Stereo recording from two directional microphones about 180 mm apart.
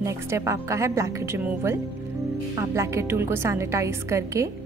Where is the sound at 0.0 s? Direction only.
15° right (ahead or behind).